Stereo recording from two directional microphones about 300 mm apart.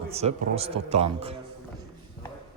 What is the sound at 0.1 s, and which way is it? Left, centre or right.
A man's voice, right.